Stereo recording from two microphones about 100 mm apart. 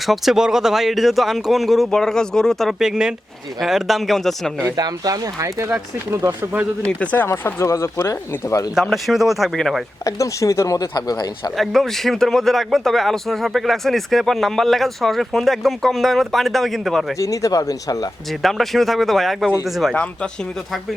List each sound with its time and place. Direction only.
0.0 s speech: centre (ahead or behind)
4.6 s speech: 40° right (ahead or behind); by 6.7 s 20° right (ahead or behind)
6.8 s speech: 15° left (ahead or behind)
7.3 s speech: 30° left (ahead or behind)
8.7 s speech: centre (ahead or behind)
10.0 s speech: 35° left (ahead or behind)
11.5 s speech: centre (ahead or behind)
17.2 s speech: 35° left (ahead or behind)
18.4 s speech: centre (ahead or behind)